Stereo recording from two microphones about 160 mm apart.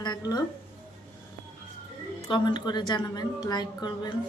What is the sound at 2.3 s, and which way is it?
A woman's voice, 30° left (ahead or behind).